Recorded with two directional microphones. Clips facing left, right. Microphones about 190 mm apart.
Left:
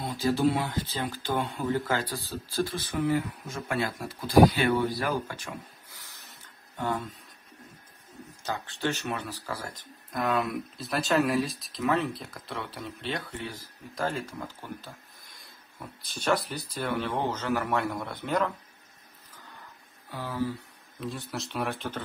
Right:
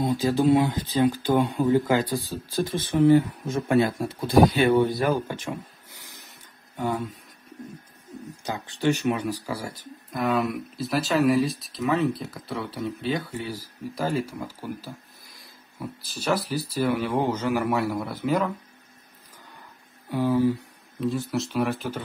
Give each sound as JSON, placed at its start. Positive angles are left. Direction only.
{"t": 0.0, "sound": "speech", "side_deg": -15}
{"t": 8.5, "sound": "speech", "side_deg": -15}
{"t": 20.1, "sound": "speech", "side_deg": -15}
{"t": 21.0, "sound": "speech", "side_deg": 0}